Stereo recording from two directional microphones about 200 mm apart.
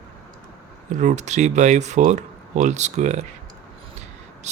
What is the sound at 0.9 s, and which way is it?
Speech, 35° right (ahead or behind).